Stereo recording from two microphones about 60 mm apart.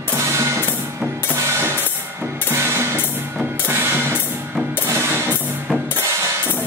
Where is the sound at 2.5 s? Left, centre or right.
Right.